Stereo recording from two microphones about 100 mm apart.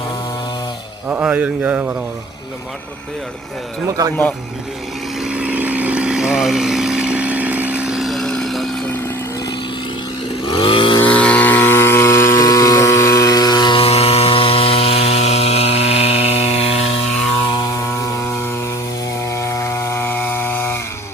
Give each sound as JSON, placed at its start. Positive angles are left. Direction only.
{"t": 1.1, "sound": "a man's voice", "side_deg": -15}
{"t": 3.8, "sound": "speech", "side_deg": -40}
{"t": 5.2, "sound": "vehicle", "side_deg": -10}
{"t": 10.4, "sound": "chainsaw", "side_deg": 55}
{"t": 11.0, "sound": "vehicle", "side_deg": 15}
{"t": 13.7, "sound": "chainsaw", "side_deg": 80}
{"t": 17.9, "sound": "chainsaw", "side_deg": 30}